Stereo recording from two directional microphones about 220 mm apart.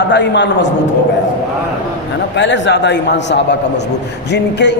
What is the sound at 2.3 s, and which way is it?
Speech, 55° left (ahead or behind).